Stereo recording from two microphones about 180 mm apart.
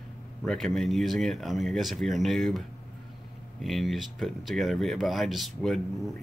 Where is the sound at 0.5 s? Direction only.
Centre (ahead or behind).